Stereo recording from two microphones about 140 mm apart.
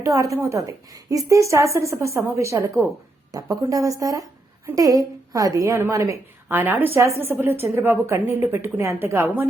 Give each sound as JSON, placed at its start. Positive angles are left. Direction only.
{"t": 0.0, "sound": "a woman's voice", "side_deg": -20}